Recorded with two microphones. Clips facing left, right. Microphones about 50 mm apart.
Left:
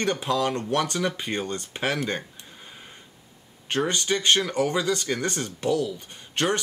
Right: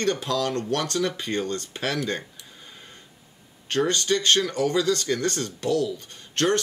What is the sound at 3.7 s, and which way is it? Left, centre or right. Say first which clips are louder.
Speech: right 2 dB; centre.